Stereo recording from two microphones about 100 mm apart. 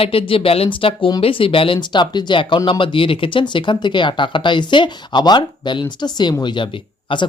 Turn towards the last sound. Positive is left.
turn(degrees=55)  # may be behind; listen again after turning